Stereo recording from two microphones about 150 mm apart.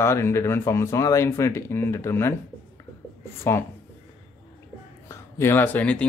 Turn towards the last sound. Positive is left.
turn(degrees=10)  # may be behind; listen again after turning